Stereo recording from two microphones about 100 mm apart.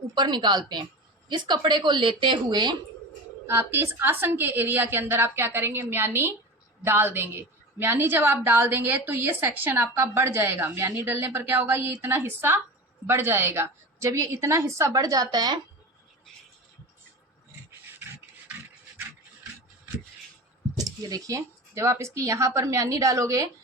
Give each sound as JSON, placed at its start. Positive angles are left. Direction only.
{"t": 0.1, "sound": "a woman's voice", "side_deg": -50}
{"t": 3.4, "sound": "a woman's voice", "side_deg": -25}
{"t": 18.0, "sound": "dog", "side_deg": -25}
{"t": 20.7, "sound": "speech", "side_deg": -35}